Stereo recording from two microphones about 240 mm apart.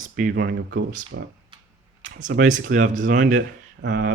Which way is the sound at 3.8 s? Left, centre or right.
Right.